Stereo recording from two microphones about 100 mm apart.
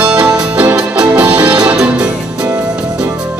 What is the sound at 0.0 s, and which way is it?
Music, 10° right (ahead or behind).